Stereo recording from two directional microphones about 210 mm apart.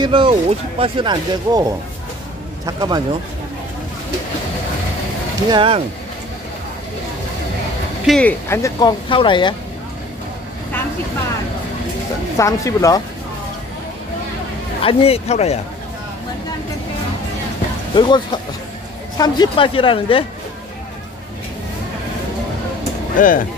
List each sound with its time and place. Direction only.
0.0 s speech: 25° right (ahead or behind)
5.5 s speech: 25° right (ahead or behind)
8.1 s speech: 5° left (ahead or behind); by 9.6 s 20° left (ahead or behind)
12.4 s speech: 15° left (ahead or behind)
14.8 s speech: 25° left (ahead or behind)
17.9 s speech: 20° left (ahead or behind)
23.1 s speech: 40° left (ahead or behind)